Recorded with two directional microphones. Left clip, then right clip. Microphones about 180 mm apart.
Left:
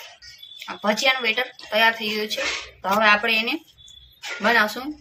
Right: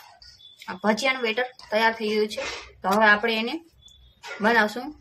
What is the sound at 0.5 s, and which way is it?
Speech, 20° right (ahead or behind).